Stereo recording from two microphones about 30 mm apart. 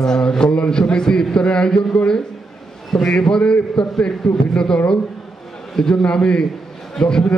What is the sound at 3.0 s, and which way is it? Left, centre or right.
A man's voice, left.